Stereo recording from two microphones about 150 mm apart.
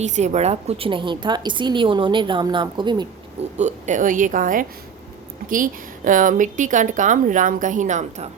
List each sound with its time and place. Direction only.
0.0 s a woman's voice: 50° right (ahead or behind); by 3.1 s 30° right (ahead or behind)
3.6 s a woman's voice: 55° right (ahead or behind)